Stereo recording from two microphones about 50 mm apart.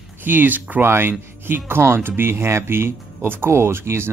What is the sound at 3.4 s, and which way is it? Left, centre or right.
Speech, right.